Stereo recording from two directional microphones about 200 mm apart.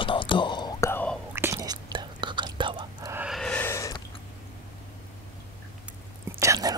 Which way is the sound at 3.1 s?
5° right (ahead or behind).